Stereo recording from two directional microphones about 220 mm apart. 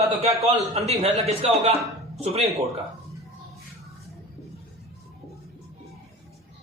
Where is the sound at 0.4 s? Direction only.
30° right (ahead or behind).